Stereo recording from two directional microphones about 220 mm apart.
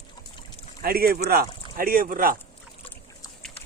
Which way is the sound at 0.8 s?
45° right (ahead or behind).